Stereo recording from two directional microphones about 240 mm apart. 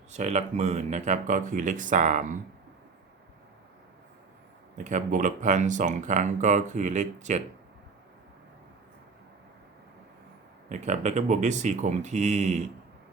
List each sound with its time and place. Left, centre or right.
0.1 s speech: right
4.8 s speech: right
10.7 s speech: right